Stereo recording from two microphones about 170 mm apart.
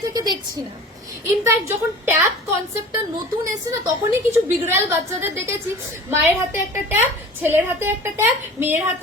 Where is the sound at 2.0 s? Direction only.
10° right (ahead or behind).